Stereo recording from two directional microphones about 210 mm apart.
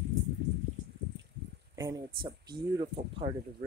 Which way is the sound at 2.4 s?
20° right (ahead or behind).